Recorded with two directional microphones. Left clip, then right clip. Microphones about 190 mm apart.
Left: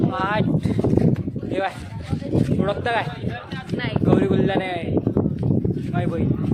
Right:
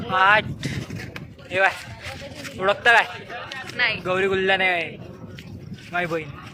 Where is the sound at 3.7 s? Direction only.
20° left (ahead or behind).